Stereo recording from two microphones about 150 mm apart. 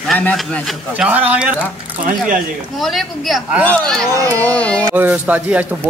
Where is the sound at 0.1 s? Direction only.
10° left (ahead or behind).